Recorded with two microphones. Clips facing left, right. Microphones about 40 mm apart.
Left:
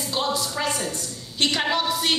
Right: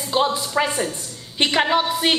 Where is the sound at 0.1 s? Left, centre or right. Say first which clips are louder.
Right 6 dB; right.